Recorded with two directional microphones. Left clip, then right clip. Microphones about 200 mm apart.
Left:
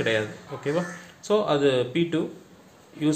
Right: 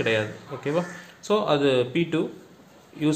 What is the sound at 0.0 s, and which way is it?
Speech, 10° right (ahead or behind).